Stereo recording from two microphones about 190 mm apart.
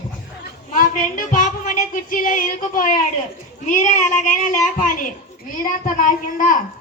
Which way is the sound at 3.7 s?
40° left (ahead or behind).